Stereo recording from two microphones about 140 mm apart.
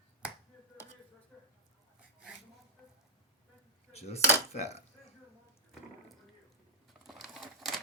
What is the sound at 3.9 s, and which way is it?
Speech, 50° left (ahead or behind).